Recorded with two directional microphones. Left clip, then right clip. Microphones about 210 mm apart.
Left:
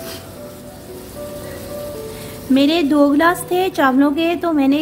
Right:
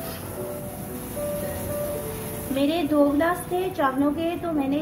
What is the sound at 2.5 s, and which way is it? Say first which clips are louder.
A woman's voice: left 8 dB; 50° left (ahead or behind).